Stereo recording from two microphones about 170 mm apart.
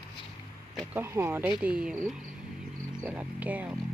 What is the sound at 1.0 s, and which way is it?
Speech, 15° right (ahead or behind).